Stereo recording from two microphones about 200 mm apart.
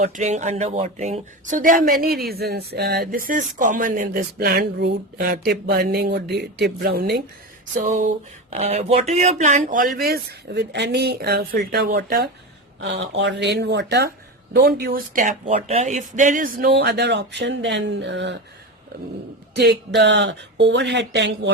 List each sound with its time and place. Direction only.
0.0 s speech: 35° right (ahead or behind)
10.0 s speech: 50° right (ahead or behind)
20.0 s speech: 60° right (ahead or behind)